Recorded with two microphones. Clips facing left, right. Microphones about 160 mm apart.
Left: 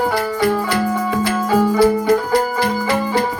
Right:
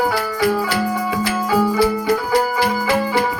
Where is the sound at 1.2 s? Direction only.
50° left (ahead or behind).